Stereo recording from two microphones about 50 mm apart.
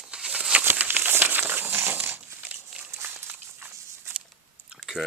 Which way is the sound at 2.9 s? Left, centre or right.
Right.